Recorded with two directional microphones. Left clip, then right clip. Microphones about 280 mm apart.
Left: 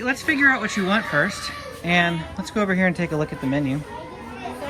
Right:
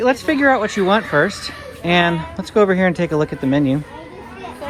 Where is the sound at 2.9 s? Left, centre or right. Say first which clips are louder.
Right 6 dB; left.